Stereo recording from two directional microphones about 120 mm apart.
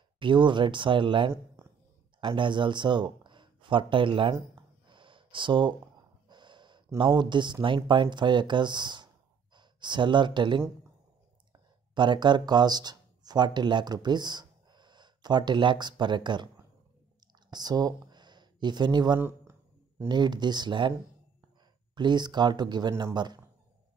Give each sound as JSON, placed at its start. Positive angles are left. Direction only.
{"t": 0.2, "sound": "speech", "side_deg": -40}
{"t": 4.8, "sound": "a sound", "side_deg": -45}
{"t": 6.2, "sound": "gasp", "side_deg": -40}
{"t": 7.0, "sound": "speech", "side_deg": -40}
{"t": 11.9, "sound": "speech", "side_deg": -40}
{"t": 17.5, "sound": "speech", "side_deg": -35}
{"t": 19.1, "sound": "speech", "side_deg": -20}
{"t": 20.1, "sound": "speech", "side_deg": -40}
{"t": 21.9, "sound": "speech", "side_deg": -40}